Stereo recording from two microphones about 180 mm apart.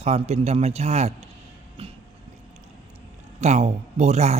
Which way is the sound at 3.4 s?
40° right (ahead or behind).